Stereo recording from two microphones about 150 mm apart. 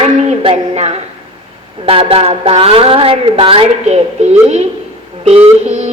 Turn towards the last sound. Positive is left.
turn(degrees=-45)  # may be behind; listen again after turning